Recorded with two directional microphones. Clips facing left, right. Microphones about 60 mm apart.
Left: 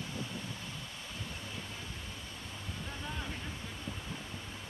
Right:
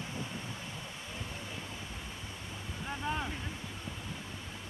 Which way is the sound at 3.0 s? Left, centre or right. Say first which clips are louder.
Right 8 dB; right.